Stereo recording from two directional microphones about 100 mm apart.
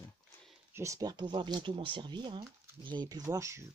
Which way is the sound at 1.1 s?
50° right (ahead or behind).